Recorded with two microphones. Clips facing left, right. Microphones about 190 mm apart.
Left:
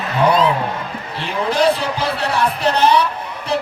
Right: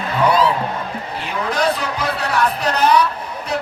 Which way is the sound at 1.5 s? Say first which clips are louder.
Left 4 dB; 30° left (ahead or behind).